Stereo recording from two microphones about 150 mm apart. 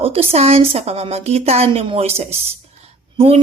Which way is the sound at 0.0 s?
40° right (ahead or behind).